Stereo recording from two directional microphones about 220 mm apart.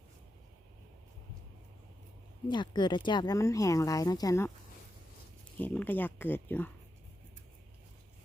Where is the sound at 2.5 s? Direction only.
20° left (ahead or behind).